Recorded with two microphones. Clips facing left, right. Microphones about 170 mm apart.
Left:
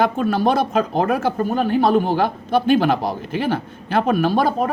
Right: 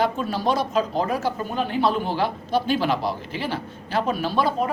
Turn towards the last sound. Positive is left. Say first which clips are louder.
# left 4 dB
turn(degrees=50)  # may be behind; listen again after turning